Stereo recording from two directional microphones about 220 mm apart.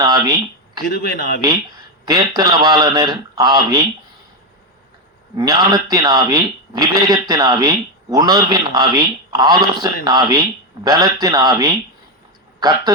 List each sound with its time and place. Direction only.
0.0 s speech: 20° right (ahead or behind)
0.9 s a man's voice: 45° left (ahead or behind)
2.0 s a man's voice: 15° right (ahead or behind)
5.4 s a man's voice: 20° right (ahead or behind)